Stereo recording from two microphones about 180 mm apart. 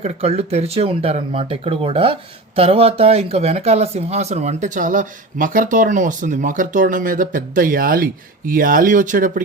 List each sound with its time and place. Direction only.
0.0 s speech: 35° right (ahead or behind)